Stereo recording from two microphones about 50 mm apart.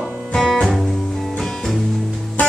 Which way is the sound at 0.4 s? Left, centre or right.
Centre.